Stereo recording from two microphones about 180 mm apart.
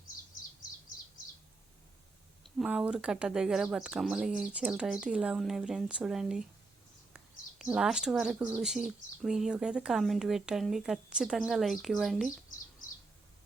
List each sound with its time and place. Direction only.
2.6 s speech: 5° right (ahead or behind)
7.6 s speech: 5° right (ahead or behind)